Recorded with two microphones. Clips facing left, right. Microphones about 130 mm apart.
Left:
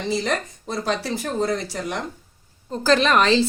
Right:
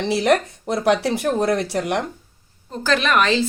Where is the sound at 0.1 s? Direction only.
75° right (ahead or behind).